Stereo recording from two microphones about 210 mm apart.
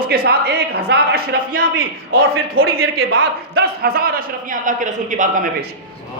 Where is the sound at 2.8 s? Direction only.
75° right (ahead or behind).